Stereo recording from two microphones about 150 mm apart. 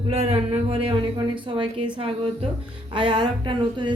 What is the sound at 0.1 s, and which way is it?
Speech, 40° right (ahead or behind).